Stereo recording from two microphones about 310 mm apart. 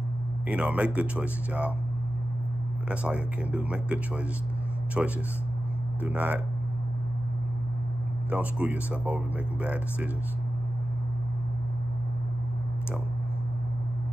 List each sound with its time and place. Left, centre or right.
0.5 s speech: centre
2.9 s speech: centre
8.3 s speech: centre